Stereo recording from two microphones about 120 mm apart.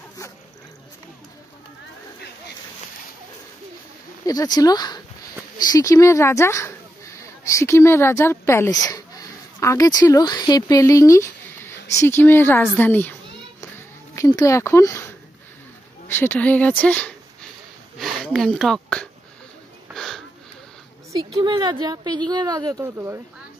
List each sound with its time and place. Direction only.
4.3 s a woman's voice: 30° left (ahead or behind); by 13.1 s 15° left (ahead or behind)
14.1 s speech: 25° left (ahead or behind)
16.1 s speech: 15° left (ahead or behind)
19.9 s a sound: 5° left (ahead or behind)
21.4 s speech: 35° right (ahead or behind)